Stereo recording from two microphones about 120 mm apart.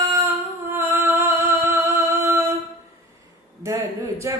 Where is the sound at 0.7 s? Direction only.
20° right (ahead or behind).